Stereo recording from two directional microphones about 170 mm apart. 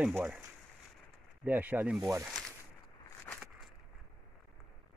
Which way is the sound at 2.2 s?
Centre (ahead or behind).